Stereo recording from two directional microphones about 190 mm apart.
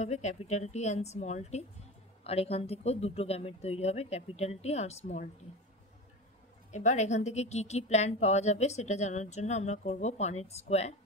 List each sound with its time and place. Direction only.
0.0 s a woman's voice: 35° left (ahead or behind)
6.7 s a woman's voice: 40° left (ahead or behind)